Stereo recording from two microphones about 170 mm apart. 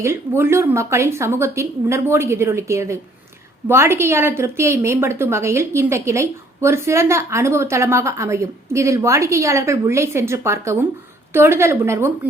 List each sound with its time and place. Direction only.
0.0 s a woman's voice: 15° right (ahead or behind)